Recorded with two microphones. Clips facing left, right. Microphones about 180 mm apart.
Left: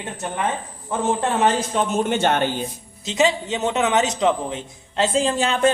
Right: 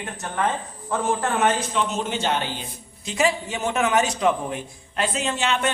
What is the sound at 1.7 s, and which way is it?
Speech, 50° left (ahead or behind).